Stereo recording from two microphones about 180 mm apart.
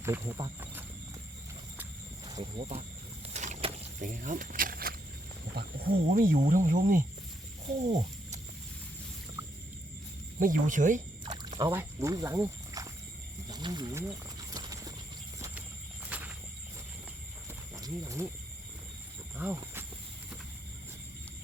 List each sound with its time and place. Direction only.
0.0 s speech: 15° right (ahead or behind)
0.6 s horse: 10° right (ahead or behind)
2.2 s cricket: 20° right (ahead or behind)
3.2 s vehicle: 40° right (ahead or behind)
5.5 s speech: 55° right (ahead or behind)
7.9 s a sound: 40° right (ahead or behind)
10.4 s speech: 45° right (ahead or behind)
11.3 s a sound: 25° right (ahead or behind)
11.8 s speech: 15° right (ahead or behind)
13.5 s horse: 25° right (ahead or behind)
16.0 s a sound: 10° right (ahead or behind)
17.7 s speech: 20° right (ahead or behind)
19.4 s speech: 10° right (ahead or behind)